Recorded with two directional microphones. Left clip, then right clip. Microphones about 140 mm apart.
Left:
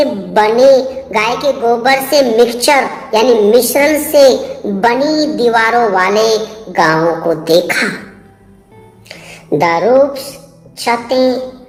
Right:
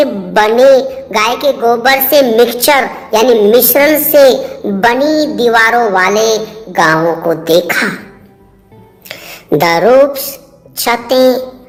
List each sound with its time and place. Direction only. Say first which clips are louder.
0.0 s a woman's voice: right 1 dB; 30° right (ahead or behind)
9.0 s a woman's voice: right 3 dB; 50° right (ahead or behind)